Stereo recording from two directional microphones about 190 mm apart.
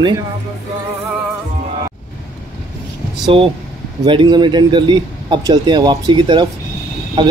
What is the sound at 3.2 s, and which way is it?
Speech, 25° right (ahead or behind).